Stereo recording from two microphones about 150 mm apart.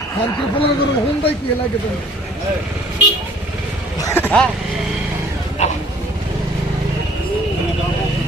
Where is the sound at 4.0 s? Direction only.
15° left (ahead or behind).